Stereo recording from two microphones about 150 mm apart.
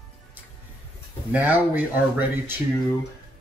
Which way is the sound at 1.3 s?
10° right (ahead or behind).